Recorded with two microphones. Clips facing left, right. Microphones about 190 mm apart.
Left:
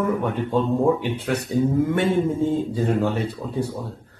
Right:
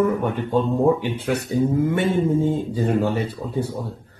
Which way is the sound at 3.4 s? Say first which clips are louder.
Right 1 dB; 15° right (ahead or behind).